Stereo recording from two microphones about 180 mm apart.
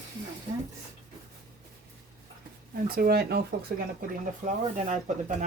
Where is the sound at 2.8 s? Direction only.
55° right (ahead or behind).